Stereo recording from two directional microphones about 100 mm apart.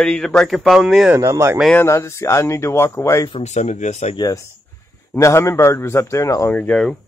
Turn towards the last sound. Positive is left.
turn(degrees=10)  # may be behind; listen again after turning